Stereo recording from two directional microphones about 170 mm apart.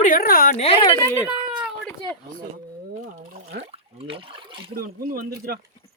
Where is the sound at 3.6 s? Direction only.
35° right (ahead or behind).